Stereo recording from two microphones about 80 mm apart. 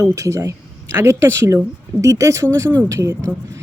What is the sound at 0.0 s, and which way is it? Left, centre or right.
Speech, right.